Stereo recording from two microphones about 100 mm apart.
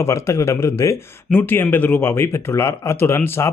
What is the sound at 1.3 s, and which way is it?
Speech, 20° left (ahead or behind).